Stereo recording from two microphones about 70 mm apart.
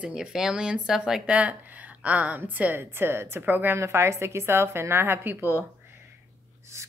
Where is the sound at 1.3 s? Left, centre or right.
Centre.